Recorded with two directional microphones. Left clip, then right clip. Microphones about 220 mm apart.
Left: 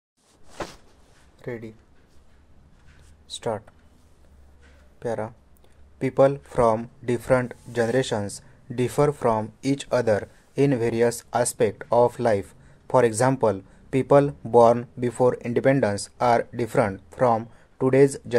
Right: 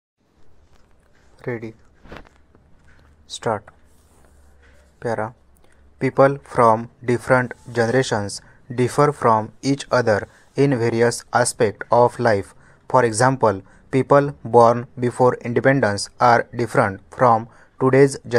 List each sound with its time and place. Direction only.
1.4 s speech: 20° right (ahead or behind)
3.3 s speech: 10° right (ahead or behind)
4.9 s speech: 5° right (ahead or behind)